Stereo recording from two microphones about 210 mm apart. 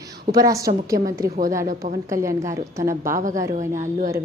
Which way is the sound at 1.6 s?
40° right (ahead or behind).